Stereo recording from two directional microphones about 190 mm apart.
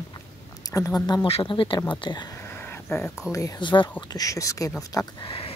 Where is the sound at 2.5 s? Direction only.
10° left (ahead or behind).